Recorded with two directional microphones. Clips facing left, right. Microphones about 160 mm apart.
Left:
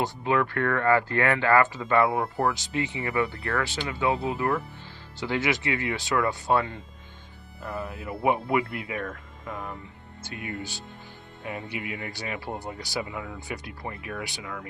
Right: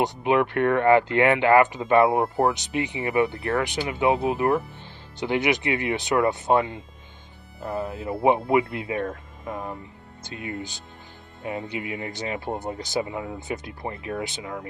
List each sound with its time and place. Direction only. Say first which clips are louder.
0.0 s speech: right 4 dB; 20° right (ahead or behind)